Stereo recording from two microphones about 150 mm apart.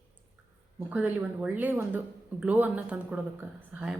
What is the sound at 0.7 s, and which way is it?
Speech, 10° right (ahead or behind).